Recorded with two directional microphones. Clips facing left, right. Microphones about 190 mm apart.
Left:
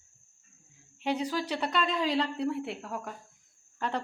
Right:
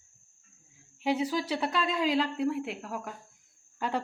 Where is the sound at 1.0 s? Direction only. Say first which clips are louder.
Right 2 dB; 5° right (ahead or behind).